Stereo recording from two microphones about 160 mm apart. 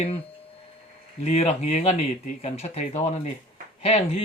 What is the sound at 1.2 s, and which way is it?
Speech, 40° left (ahead or behind).